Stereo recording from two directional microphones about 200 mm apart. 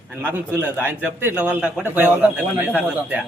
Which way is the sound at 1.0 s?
10° right (ahead or behind).